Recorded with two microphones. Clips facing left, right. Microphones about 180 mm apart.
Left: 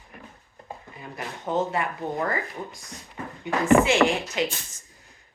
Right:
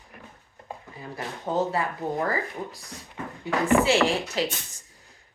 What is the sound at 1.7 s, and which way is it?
Speech, 35° right (ahead or behind).